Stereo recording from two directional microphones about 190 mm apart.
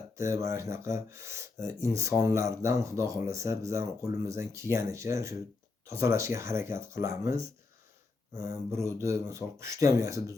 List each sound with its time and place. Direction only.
0.2 s speech: 15° right (ahead or behind)
8.4 s speech: 15° right (ahead or behind)